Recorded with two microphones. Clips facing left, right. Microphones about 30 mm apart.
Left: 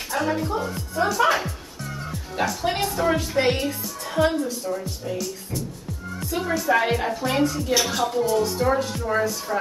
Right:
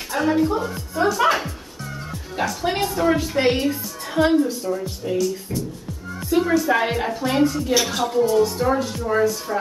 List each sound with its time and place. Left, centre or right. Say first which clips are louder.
0.1 s a woman's voice: right 5 dB; centre
6.1 s music: right 7 dB; centre
6.7 s a woman's voice: even; centre
7.7 s speech: right 2 dB; centre